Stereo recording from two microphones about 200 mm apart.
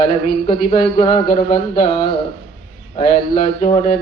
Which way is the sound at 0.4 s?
25° left (ahead or behind).